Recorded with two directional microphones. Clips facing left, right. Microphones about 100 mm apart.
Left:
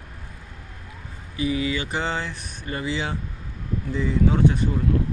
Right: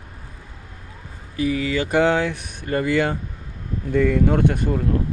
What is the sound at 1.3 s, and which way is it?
Speech, 50° right (ahead or behind).